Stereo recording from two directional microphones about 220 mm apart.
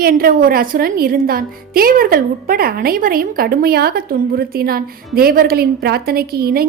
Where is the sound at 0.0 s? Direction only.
40° right (ahead or behind).